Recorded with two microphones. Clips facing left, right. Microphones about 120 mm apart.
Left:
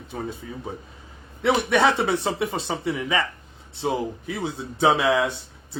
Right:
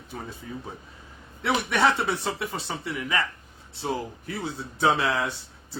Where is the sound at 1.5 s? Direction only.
20° left (ahead or behind).